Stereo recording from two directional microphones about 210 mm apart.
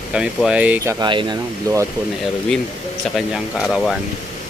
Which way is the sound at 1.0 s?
20° right (ahead or behind).